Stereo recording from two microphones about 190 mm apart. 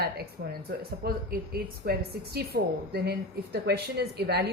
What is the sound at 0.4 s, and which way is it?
A woman's voice, 55° right (ahead or behind).